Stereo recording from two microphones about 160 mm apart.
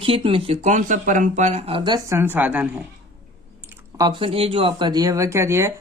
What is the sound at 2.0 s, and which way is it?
Speech, 15° right (ahead or behind).